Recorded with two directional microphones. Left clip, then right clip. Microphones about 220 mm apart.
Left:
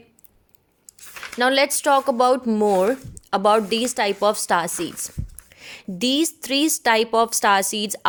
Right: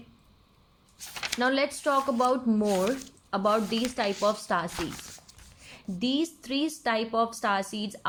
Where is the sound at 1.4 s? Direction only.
45° left (ahead or behind).